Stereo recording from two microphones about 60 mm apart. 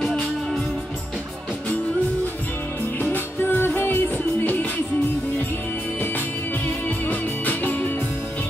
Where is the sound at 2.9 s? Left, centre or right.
Left.